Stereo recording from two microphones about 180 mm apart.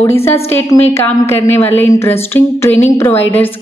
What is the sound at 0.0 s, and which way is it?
A woman's voice, 15° left (ahead or behind).